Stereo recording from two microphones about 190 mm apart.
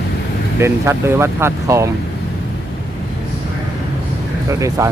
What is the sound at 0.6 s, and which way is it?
Speech, 15° right (ahead or behind).